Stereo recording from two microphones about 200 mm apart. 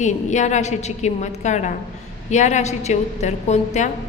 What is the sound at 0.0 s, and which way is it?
A woman's voice, 35° left (ahead or behind).